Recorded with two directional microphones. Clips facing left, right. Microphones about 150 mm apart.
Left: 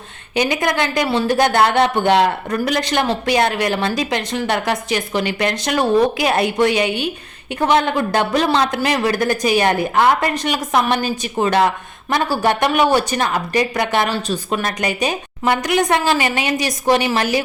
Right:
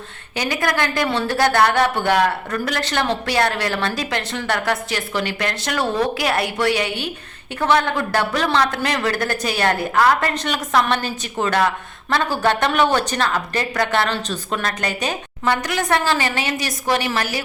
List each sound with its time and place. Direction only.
0.3 s speech: 20° left (ahead or behind)